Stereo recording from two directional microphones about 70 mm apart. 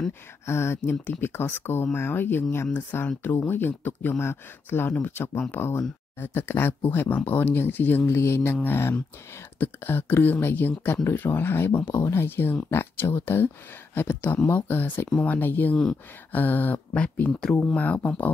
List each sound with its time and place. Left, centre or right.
0.5 s speech: left; by 17.3 s centre
17.3 s speech: centre
17.6 s speech: centre